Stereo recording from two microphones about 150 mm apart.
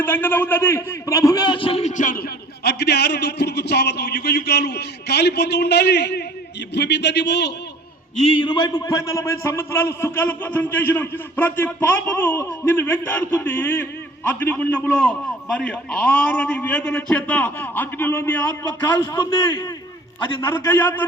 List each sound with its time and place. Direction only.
0.0 s a man's voice: 15° left (ahead or behind); by 1.9 s 40° left (ahead or behind)
2.0 s a man's voice: 65° left (ahead or behind)
2.6 s a man's voice: 90° left
8.1 s a man's voice: 45° left (ahead or behind)
8.4 s a man's voice: 30° left (ahead or behind); by 18.5 s 10° left (ahead or behind)
19.1 s a man's voice: 30° left (ahead or behind)